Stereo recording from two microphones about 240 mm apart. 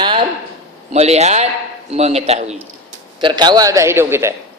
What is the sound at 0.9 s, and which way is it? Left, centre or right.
A man's voice, right.